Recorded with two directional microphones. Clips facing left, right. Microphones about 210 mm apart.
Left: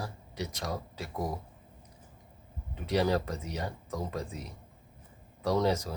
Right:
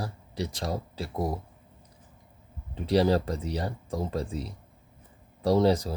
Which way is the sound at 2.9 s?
30° right (ahead or behind).